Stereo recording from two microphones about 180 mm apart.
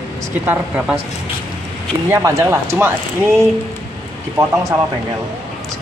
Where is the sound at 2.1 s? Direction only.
15° right (ahead or behind).